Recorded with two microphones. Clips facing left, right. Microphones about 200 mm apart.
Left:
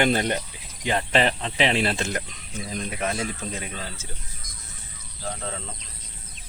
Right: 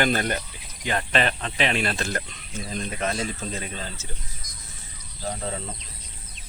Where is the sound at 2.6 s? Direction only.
5° left (ahead or behind).